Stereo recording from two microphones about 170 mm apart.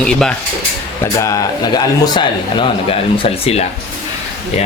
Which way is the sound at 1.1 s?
20° left (ahead or behind).